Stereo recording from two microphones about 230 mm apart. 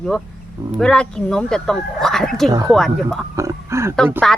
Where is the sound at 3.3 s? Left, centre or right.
Centre.